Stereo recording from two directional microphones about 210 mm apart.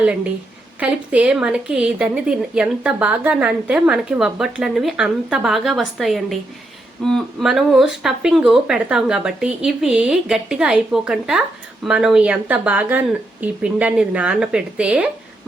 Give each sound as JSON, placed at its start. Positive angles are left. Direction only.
{"t": 0.8, "sound": "speech", "side_deg": -5}